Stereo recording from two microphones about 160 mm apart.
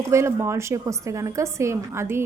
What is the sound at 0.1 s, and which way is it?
A woman's voice, 15° right (ahead or behind).